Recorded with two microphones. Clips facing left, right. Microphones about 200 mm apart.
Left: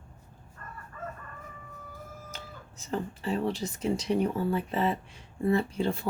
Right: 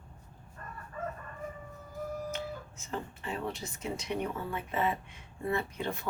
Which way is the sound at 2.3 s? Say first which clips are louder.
Right 7 dB; 35° left (ahead or behind).